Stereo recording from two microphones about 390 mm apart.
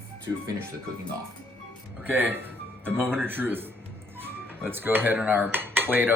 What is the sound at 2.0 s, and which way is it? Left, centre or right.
Speech, centre.